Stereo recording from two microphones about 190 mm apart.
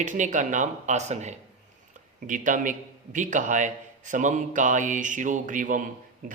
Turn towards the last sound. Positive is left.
turn(degrees=-45)  # may be behind; listen again after turning